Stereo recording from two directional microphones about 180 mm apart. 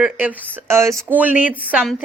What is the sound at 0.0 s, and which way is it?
Speech, 10° right (ahead or behind).